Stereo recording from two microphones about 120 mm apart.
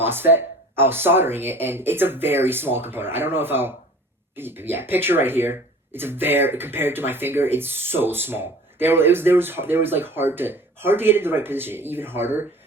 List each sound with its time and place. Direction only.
0.0 s speech: 20° right (ahead or behind)